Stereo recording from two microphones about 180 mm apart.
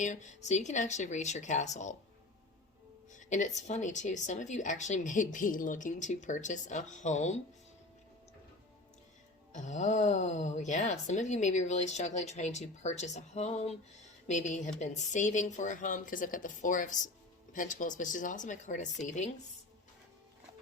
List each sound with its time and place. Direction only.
0.0 s speech: 40° left (ahead or behind)
3.1 s a woman's voice: 45° left (ahead or behind)
9.5 s a woman's voice: 40° left (ahead or behind)